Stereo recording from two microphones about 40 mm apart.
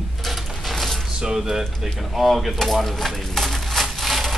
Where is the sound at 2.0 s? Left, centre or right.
Centre.